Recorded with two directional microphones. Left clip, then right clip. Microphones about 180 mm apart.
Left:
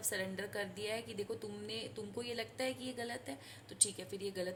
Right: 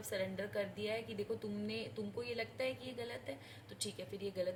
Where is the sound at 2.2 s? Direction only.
50° left (ahead or behind).